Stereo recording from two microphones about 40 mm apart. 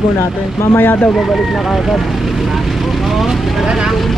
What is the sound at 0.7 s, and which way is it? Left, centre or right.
Speech, left.